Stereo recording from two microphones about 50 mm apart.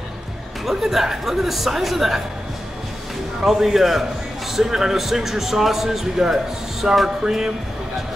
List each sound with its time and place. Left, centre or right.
0.7 s speech: centre
3.4 s speech: centre